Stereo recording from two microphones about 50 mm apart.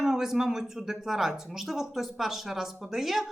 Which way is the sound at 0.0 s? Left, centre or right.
Centre.